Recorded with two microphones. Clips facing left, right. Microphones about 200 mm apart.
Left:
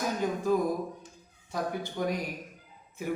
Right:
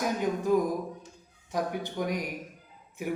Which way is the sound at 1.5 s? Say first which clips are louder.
Right 1 dB; 15° right (ahead or behind).